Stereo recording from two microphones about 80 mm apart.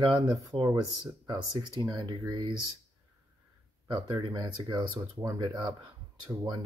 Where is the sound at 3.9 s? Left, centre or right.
Right.